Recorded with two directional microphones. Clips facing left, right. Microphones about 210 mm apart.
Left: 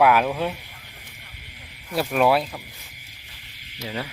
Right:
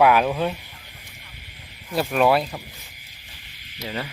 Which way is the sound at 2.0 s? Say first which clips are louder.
Right 1 dB; centre (ahead or behind).